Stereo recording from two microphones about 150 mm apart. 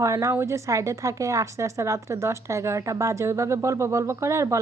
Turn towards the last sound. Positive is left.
turn(degrees=-20)  # may be behind; listen again after turning